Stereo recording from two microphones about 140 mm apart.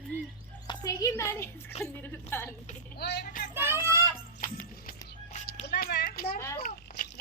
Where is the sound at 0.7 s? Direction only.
25° left (ahead or behind).